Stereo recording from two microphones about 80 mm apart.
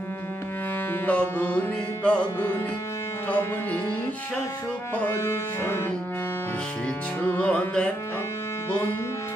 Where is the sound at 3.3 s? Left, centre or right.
Left.